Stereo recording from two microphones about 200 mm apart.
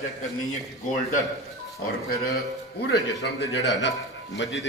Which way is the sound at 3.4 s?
60° left (ahead or behind).